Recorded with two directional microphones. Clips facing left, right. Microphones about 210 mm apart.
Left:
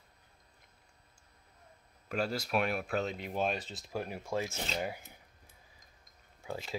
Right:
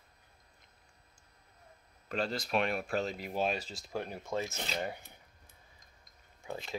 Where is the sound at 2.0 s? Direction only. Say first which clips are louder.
Left 1 dB; 10° left (ahead or behind).